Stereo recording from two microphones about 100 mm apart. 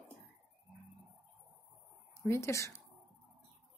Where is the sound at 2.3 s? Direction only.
30° left (ahead or behind).